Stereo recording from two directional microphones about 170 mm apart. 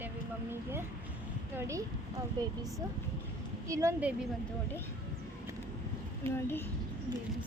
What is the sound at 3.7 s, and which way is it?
Speech, 20° right (ahead or behind).